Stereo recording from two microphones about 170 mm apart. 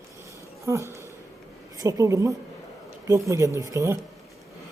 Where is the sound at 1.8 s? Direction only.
20° right (ahead or behind).